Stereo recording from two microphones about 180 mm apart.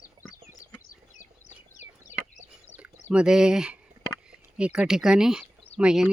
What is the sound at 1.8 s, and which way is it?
Chicken, 10° right (ahead or behind).